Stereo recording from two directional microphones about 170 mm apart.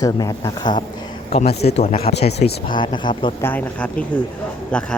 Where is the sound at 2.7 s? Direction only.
30° left (ahead or behind).